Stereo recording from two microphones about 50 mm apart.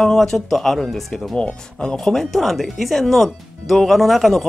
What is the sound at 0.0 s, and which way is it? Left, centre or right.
Speech, centre.